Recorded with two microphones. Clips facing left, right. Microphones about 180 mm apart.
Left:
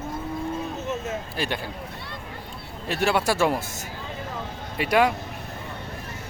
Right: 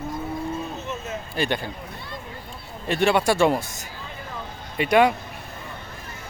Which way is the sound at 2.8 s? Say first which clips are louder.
Right 3 dB; 5° left (ahead or behind).